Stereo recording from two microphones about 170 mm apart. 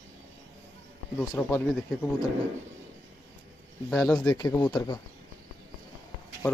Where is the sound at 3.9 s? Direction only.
5° left (ahead or behind).